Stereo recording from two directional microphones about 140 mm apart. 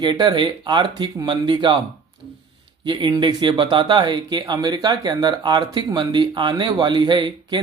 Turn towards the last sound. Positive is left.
turn(degrees=-35)  # may be behind; listen again after turning